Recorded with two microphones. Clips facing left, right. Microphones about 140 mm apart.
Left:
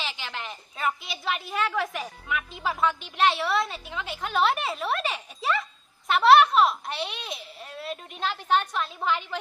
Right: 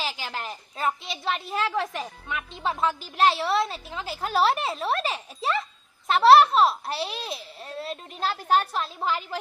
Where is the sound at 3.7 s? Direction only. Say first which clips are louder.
Right 2 dB; centre (ahead or behind).